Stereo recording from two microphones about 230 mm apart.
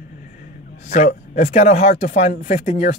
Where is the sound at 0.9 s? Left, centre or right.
Left.